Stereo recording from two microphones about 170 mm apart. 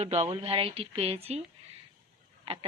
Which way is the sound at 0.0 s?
40° right (ahead or behind).